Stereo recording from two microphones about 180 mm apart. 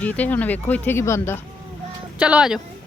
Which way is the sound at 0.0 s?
10° left (ahead or behind).